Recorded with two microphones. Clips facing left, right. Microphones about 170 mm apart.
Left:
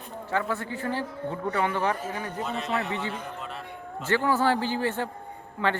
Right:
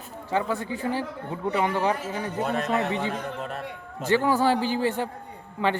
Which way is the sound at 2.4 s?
50° right (ahead or behind).